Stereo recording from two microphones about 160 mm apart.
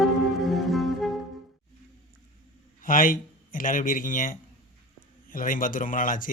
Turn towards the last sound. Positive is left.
turn(degrees=55)  # may be behind; listen again after turning